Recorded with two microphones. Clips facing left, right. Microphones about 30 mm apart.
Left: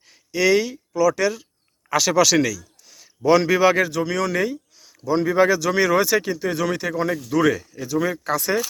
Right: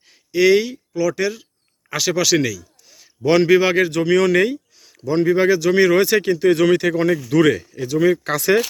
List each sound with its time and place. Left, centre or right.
0.3 s a man's voice: right
3.2 s speech: right
3.9 s speech: right
5.1 s speech: right
6.4 s speech: right
7.7 s speech: right
7.9 s speech: right
8.2 s speech: right